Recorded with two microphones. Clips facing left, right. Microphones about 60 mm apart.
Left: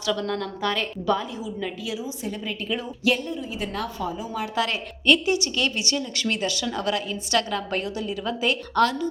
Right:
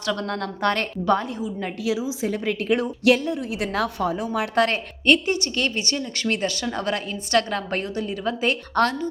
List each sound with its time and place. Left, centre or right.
0.2 s a woman's voice: right
1.8 s a woman's voice: right
4.4 s a woman's voice: right